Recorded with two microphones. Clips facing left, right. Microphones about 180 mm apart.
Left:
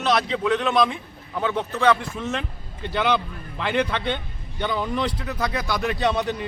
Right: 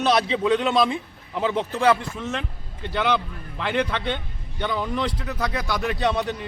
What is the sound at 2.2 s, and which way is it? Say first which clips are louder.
A man's voice: left 1 dB; 10° left (ahead or behind).